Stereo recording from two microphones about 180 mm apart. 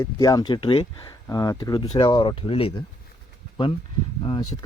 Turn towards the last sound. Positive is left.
turn(degrees=25)  # may be behind; listen again after turning